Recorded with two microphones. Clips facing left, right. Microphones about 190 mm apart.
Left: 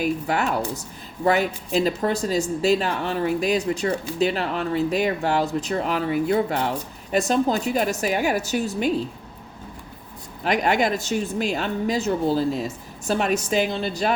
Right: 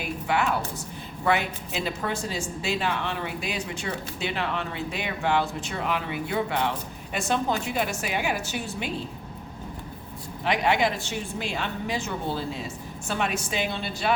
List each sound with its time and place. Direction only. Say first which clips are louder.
0.0 s speech: left 4 dB; 40° left (ahead or behind)
10.4 s speech: left 3 dB; 45° left (ahead or behind)